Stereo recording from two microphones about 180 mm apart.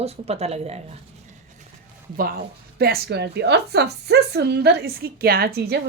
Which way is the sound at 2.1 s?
55° right (ahead or behind).